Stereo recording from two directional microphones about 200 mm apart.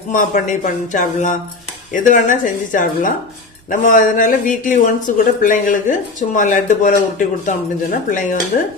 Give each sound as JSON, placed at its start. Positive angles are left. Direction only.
{"t": 0.1, "sound": "speech", "side_deg": 40}